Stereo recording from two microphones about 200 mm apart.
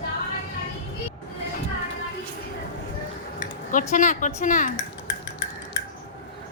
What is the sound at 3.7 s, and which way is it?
A woman's voice, 40° left (ahead or behind).